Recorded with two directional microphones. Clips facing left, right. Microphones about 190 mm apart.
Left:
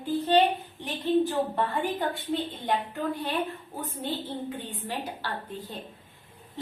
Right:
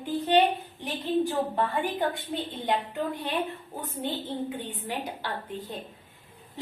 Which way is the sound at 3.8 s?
15° right (ahead or behind).